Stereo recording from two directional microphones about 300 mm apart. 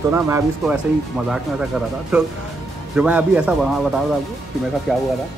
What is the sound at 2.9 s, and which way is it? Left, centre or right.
Speech, centre.